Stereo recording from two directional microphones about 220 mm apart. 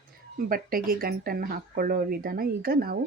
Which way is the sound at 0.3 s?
40° right (ahead or behind).